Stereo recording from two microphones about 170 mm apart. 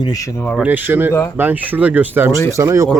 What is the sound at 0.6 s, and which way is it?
Speech, 10° right (ahead or behind).